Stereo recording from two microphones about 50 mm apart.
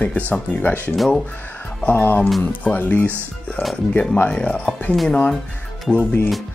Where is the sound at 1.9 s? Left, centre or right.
Left.